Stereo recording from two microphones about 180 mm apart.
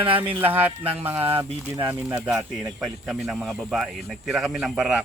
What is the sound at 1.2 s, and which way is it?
Speech, 30° right (ahead or behind).